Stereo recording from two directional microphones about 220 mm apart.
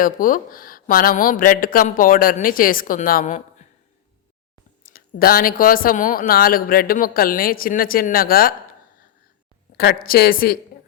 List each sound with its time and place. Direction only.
0.0 s speech: 40° left (ahead or behind)
4.9 s speech: 40° left (ahead or behind)
9.7 s speech: 45° left (ahead or behind)